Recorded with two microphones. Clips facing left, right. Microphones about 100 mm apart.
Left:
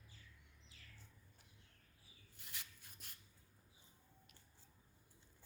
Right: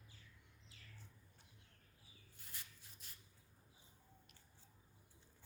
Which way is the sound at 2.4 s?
85° left.